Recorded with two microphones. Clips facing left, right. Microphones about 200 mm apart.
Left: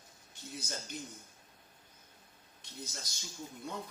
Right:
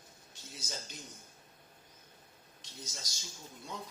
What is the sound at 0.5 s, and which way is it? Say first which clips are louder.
Speech: left 3 dB; 55° left (ahead or behind).